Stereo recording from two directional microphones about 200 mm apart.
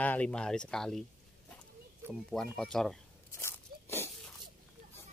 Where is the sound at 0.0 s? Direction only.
10° left (ahead or behind).